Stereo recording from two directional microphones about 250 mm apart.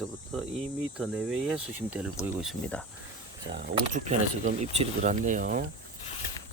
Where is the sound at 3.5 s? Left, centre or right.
Right.